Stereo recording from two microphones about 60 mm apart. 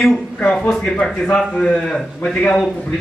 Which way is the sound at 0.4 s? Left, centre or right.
Centre.